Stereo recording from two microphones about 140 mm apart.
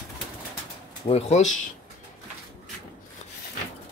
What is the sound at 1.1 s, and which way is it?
Speech, 55° left (ahead or behind).